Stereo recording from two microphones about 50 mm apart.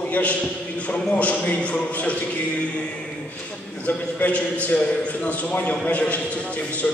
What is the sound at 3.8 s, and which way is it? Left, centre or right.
Speech, left.